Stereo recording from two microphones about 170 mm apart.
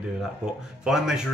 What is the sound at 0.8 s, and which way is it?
Speech, 5° right (ahead or behind).